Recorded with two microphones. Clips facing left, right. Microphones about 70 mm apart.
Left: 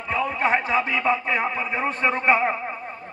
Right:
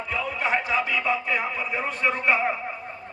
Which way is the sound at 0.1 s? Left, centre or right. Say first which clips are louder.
Left 4 dB; left.